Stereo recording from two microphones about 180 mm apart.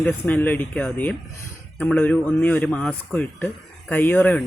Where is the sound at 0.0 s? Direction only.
10° left (ahead or behind).